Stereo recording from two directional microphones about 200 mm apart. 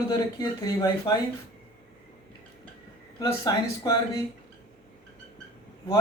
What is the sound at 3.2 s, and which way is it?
Speech, 20° left (ahead or behind).